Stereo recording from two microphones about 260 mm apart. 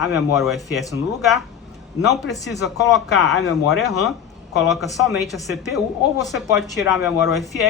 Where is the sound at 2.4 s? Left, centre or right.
Centre.